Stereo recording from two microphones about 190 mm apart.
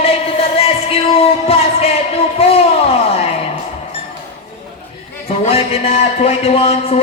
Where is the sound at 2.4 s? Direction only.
30° left (ahead or behind).